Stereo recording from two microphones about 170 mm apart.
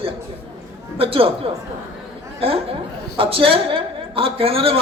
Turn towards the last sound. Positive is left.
turn(degrees=-35)  # may be behind; listen again after turning